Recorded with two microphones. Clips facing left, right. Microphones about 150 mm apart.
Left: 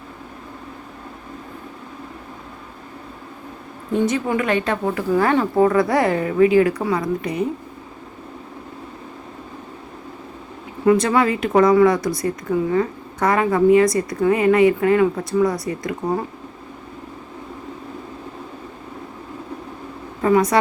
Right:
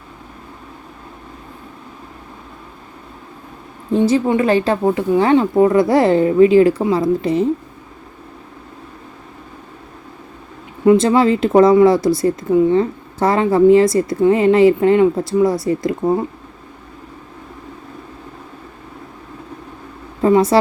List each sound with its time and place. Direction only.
3.9 s speech: 30° right (ahead or behind)
10.8 s speech: 25° right (ahead or behind)
20.2 s a woman's voice: 25° right (ahead or behind)